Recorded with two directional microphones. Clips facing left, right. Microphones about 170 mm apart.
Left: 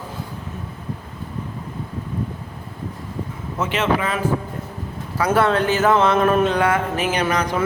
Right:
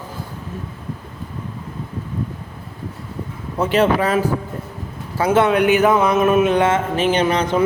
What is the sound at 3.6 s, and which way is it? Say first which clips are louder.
Speech: right 5 dB; 40° right (ahead or behind).